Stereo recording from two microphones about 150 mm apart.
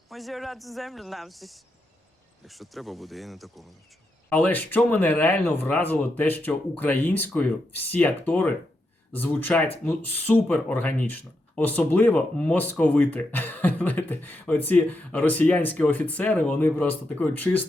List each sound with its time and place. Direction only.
0.1 s speech: centre (ahead or behind)
4.3 s speech: 10° left (ahead or behind)